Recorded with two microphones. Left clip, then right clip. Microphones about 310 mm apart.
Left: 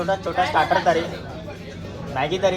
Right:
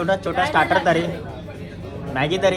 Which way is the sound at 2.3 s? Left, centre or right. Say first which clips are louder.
Right 2 dB; right.